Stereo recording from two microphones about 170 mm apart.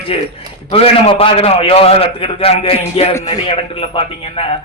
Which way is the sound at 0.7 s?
35° left (ahead or behind).